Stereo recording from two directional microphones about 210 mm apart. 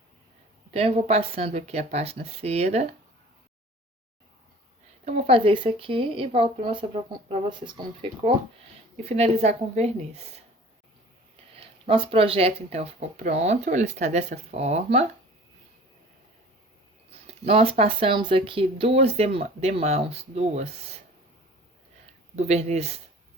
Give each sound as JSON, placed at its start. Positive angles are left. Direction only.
{"t": 0.7, "sound": "speech", "side_deg": -30}
{"t": 5.0, "sound": "speech", "side_deg": -30}
{"t": 11.5, "sound": "speech", "side_deg": -25}
{"t": 17.1, "sound": "speech", "side_deg": -30}
{"t": 22.4, "sound": "speech", "side_deg": -30}